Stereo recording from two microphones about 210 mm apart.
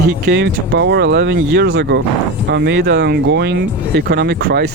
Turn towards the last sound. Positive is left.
turn(degrees=-50)  # may be behind; listen again after turning